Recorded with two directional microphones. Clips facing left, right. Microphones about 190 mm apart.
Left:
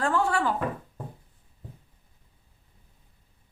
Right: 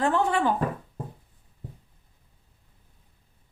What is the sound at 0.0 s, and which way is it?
Speech, 20° right (ahead or behind).